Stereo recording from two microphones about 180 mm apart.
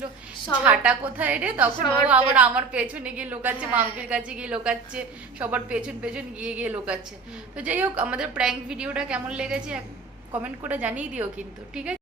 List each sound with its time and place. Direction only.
0.6 s a woman's voice: 10° right (ahead or behind)